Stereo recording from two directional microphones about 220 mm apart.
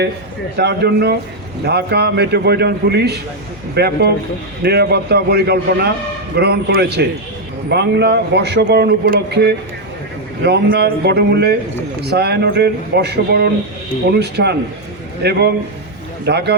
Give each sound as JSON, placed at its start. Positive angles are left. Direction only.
{"t": 0.5, "sound": "a man's voice", "side_deg": -50}